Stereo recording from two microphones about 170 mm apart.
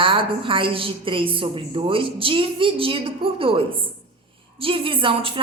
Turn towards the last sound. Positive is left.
turn(degrees=-30)  # may be behind; listen again after turning